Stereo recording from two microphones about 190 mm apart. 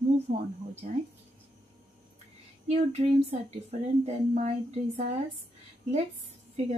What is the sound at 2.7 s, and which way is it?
Speech, 35° right (ahead or behind).